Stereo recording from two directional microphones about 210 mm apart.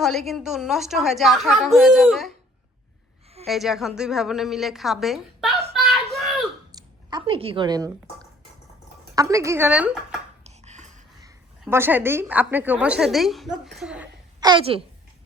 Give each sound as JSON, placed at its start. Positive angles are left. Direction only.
{"t": 0.0, "sound": "a woman's voice", "side_deg": 0}
{"t": 3.4, "sound": "a woman's voice", "side_deg": 0}
{"t": 5.7, "sound": "a sound", "side_deg": 0}
{"t": 6.7, "sound": "speech", "side_deg": -20}
{"t": 9.1, "sound": "a woman's voice", "side_deg": -15}
{"t": 10.4, "sound": "a sound", "side_deg": -35}
{"t": 11.6, "sound": "a woman's voice", "side_deg": -10}
{"t": 14.4, "sound": "a woman's voice", "side_deg": -25}